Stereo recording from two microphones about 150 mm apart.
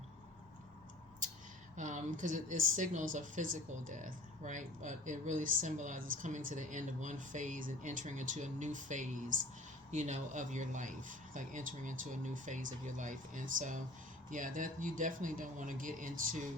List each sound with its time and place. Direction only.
1.7 s speech: 55° right (ahead or behind)